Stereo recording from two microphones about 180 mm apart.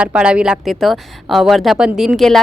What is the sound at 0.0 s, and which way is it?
A woman's voice, 5° right (ahead or behind).